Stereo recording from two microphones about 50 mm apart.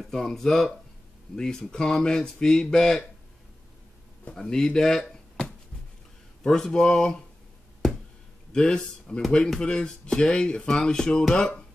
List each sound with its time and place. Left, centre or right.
0.0 s speech: centre
4.4 s speech: centre
8.5 s speech: centre